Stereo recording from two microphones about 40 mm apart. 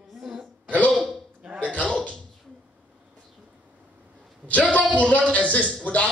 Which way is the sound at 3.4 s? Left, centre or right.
Right.